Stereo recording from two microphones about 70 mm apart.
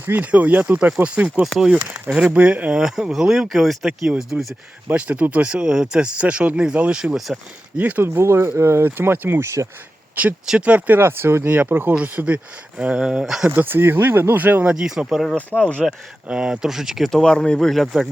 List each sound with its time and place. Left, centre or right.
0.0 s speech: right
2.8 s speech: centre
4.9 s speech: right
7.0 s speech: centre
7.8 s speech: right
8.0 s speech: right
11.9 s speech: right
13.6 s speech: right
14.8 s speech: centre
15.4 s speech: left
15.8 s speech: centre
17.1 s speech: centre
17.7 s speech: centre